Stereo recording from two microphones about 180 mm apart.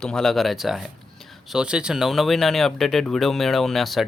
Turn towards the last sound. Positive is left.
turn(degrees=0)  # may be behind; listen again after turning